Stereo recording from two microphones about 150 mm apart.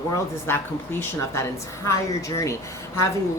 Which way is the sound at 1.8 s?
20° left (ahead or behind).